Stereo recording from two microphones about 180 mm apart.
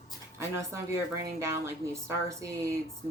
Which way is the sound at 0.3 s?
15° right (ahead or behind).